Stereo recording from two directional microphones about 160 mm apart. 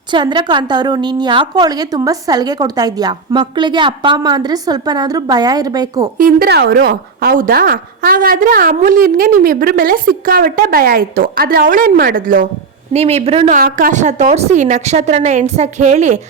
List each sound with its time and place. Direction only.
0.1 s a woman's voice: 30° right (ahead or behind)
6.1 s a woman's voice: 65° right (ahead or behind)
12.9 s a woman's voice: 40° right (ahead or behind)
13.5 s a woman's voice: 55° right (ahead or behind)